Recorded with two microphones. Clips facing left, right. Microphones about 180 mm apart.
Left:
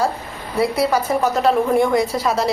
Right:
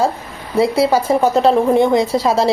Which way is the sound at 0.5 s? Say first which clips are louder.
Right 4 dB; 25° right (ahead or behind).